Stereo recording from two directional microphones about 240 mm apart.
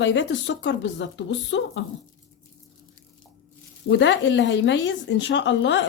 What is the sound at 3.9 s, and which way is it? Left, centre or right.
Speech, left.